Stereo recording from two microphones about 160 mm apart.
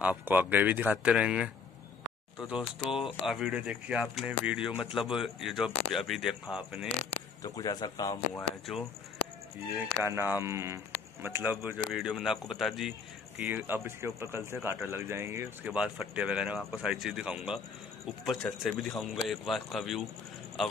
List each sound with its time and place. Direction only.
0.0 s speech: 10° right (ahead or behind)
7.4 s speech: 20° left (ahead or behind)
10.0 s speech: 15° right (ahead or behind)
13.4 s speech: 10° right (ahead or behind)